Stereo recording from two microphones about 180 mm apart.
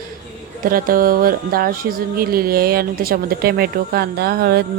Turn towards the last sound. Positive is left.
turn(degrees=-60)  # may be behind; listen again after turning